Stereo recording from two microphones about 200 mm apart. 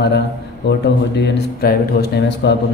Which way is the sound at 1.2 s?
55° left (ahead or behind).